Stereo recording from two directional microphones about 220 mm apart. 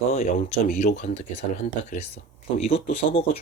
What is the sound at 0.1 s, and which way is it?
Speech, 35° left (ahead or behind).